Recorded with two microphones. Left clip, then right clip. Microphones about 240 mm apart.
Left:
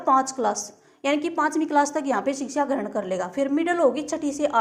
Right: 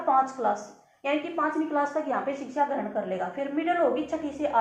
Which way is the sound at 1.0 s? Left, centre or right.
Left.